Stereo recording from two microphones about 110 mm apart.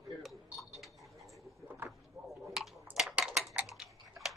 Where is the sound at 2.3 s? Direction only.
Centre (ahead or behind).